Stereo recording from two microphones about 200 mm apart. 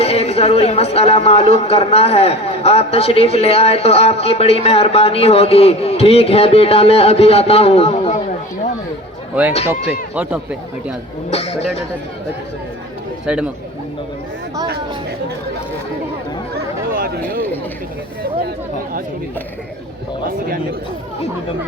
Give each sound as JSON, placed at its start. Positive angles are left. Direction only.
{"t": 0.0, "sound": "a man's voice", "side_deg": 30}
{"t": 10.2, "sound": "speech", "side_deg": -5}
{"t": 11.3, "sound": "a man's voice", "side_deg": 30}
{"t": 13.2, "sound": "speech", "side_deg": -5}
{"t": 16.6, "sound": "chatter", "side_deg": -45}